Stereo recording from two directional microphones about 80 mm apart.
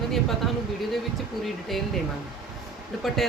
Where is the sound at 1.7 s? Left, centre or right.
Centre.